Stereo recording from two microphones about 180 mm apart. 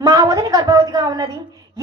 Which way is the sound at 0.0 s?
20° right (ahead or behind).